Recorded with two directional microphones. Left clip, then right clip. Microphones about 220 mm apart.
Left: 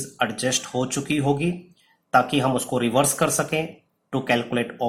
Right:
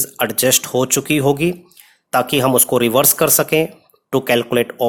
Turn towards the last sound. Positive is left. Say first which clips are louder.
# right 8 dB
turn(degrees=-45)  # may be behind; listen again after turning